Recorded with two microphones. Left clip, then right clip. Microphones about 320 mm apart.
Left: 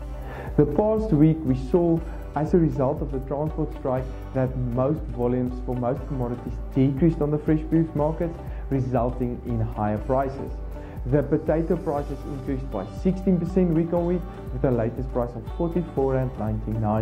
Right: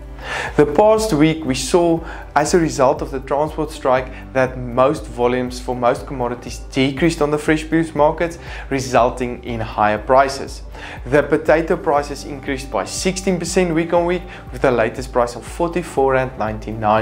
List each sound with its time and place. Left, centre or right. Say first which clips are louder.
0.3 s speech: right 8 dB; centre
15.6 s speech: right 8 dB; right
16.1 s speech: right 9 dB; centre